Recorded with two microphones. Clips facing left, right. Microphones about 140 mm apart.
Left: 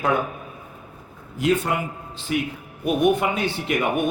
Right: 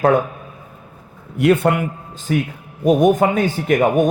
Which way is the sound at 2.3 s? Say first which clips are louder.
Right 5 dB; 40° right (ahead or behind).